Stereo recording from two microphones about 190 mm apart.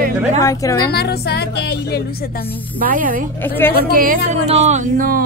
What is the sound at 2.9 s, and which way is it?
Speech, 45° right (ahead or behind).